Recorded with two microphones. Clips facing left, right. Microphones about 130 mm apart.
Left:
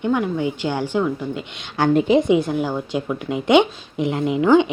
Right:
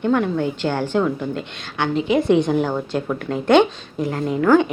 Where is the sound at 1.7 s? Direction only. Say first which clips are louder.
Left 5 dB; 45° left (ahead or behind).